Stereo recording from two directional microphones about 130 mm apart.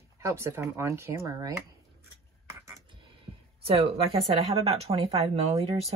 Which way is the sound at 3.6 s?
45° right (ahead or behind).